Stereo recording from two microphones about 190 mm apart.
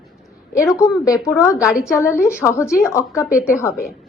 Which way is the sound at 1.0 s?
15° left (ahead or behind).